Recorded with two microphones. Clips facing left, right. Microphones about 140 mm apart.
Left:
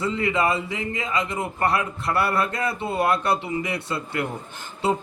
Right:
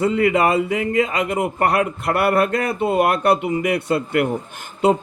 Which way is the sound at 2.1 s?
55° right (ahead or behind).